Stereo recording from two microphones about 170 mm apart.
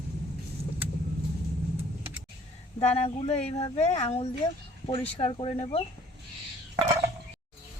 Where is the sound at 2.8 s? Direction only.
40° left (ahead or behind).